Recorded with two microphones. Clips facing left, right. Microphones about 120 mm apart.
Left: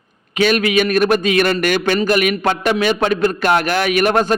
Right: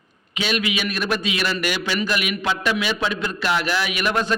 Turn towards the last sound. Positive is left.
turn(degrees=50)  # may be behind; listen again after turning